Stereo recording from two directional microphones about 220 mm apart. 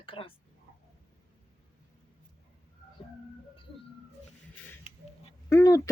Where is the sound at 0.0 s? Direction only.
25° left (ahead or behind).